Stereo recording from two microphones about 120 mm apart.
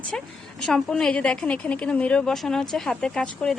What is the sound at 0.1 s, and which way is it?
A woman's voice, 5° left (ahead or behind).